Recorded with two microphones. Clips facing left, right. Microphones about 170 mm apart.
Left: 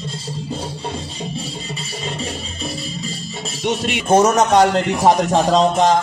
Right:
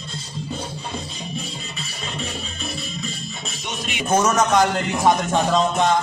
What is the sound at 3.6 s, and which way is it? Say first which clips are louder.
Speech: left 11 dB; 65° left (ahead or behind).